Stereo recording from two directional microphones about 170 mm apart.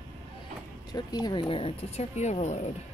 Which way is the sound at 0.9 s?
25° left (ahead or behind).